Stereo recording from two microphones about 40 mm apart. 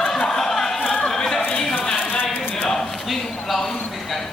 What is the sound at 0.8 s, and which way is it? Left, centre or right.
Chatter, left.